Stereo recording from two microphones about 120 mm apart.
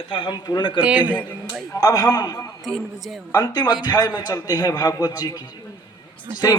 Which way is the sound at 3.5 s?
35° left (ahead or behind).